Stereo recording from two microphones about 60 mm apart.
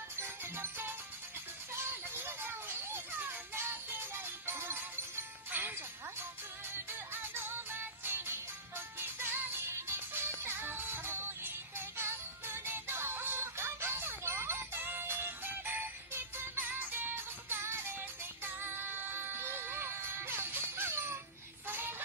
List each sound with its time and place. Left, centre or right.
0.2 s music: right
1.7 s children playing: right
7.1 s music: right
9.6 s music: right
17.6 s music: right